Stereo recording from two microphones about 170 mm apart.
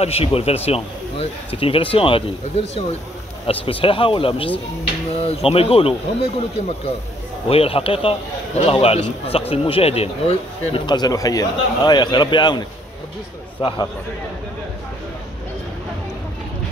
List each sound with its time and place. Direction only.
0.0 s speech: 35° left (ahead or behind)
7.4 s speech: 35° left (ahead or behind)